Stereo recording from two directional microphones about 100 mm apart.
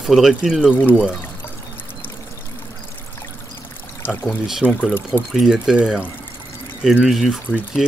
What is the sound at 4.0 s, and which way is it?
Speech, 15° left (ahead or behind).